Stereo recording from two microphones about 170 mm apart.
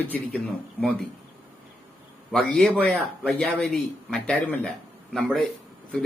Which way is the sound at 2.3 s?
5° left (ahead or behind).